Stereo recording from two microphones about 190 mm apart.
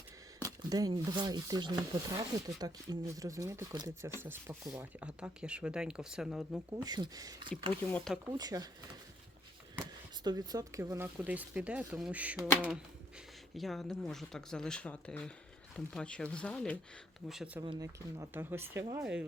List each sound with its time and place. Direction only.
0.4 s speech: 20° right (ahead or behind); by 6.6 s 5° right (ahead or behind)
6.7 s speech: 20° right (ahead or behind)
7.7 s speech: 5° left (ahead or behind)
8.3 s speech: 20° right (ahead or behind)
10.2 s speech: 20° right (ahead or behind)
13.6 s speech: centre (ahead or behind)
17.6 s speech: 20° right (ahead or behind); by 19.2 s 5° right (ahead or behind)